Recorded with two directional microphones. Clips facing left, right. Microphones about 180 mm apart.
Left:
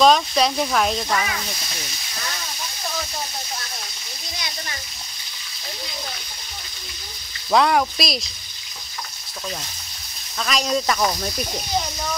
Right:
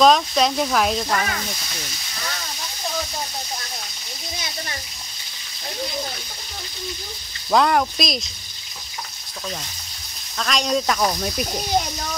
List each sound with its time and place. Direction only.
0.0 s speech: centre (ahead or behind)
7.5 s speech: centre (ahead or behind)
10.4 s speech: 5° left (ahead or behind)